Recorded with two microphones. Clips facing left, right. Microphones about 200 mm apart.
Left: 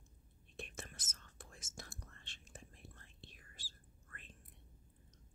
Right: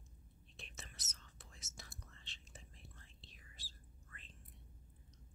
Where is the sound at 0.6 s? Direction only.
50° left (ahead or behind).